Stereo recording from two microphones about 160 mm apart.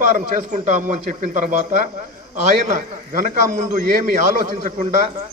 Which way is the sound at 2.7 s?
55° right (ahead or behind).